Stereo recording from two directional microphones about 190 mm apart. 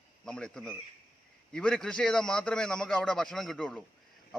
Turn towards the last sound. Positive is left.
turn(degrees=5)  # may be behind; listen again after turning